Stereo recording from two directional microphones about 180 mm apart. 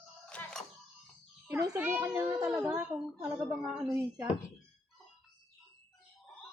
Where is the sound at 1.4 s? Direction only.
15° right (ahead or behind).